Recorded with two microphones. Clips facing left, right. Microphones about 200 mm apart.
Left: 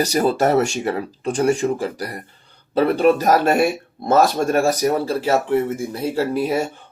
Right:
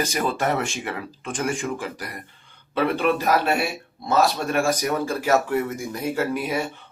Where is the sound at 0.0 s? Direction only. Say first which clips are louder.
Left 7 dB; 40° left (ahead or behind).